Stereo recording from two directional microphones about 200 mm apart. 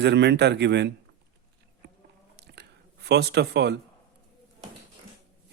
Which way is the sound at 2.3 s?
55° right (ahead or behind).